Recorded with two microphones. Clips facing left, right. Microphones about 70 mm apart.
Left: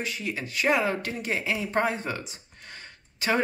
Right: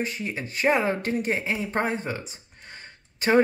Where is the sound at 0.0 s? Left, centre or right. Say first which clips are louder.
Right 2 dB; right.